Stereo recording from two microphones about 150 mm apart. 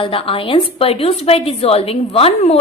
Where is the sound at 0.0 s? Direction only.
35° left (ahead or behind).